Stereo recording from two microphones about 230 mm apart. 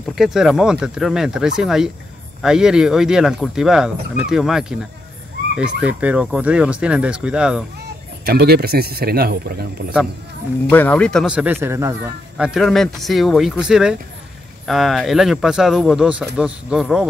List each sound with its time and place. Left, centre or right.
0.1 s speech: centre
8.3 s speech: right
10.7 s speech: centre